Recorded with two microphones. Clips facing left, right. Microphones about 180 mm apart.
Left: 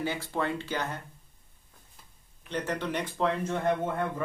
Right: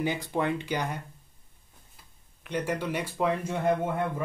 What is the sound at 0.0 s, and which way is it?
Speech, 15° right (ahead or behind).